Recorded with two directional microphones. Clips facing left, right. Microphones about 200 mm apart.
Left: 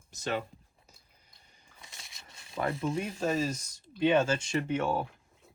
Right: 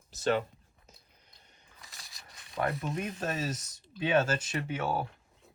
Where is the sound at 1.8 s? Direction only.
Centre (ahead or behind).